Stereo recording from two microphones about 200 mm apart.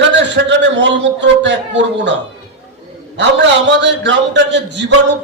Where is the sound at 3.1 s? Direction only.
65° right (ahead or behind).